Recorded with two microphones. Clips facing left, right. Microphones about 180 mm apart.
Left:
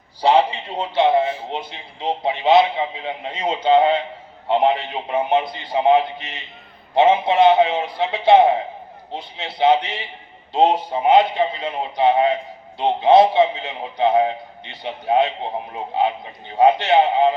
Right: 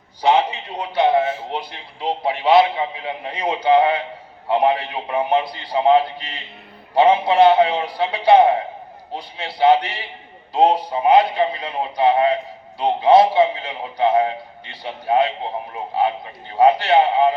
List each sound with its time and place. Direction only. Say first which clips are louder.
0.2 s a man's voice: left 1 dB; 30° left (ahead or behind)
16.6 s a man's voice: even; 20° left (ahead or behind)